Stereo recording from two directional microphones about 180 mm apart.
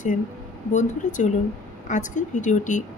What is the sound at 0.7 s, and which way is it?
Speech, 40° left (ahead or behind).